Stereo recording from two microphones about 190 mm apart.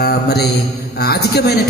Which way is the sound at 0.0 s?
55° left (ahead or behind).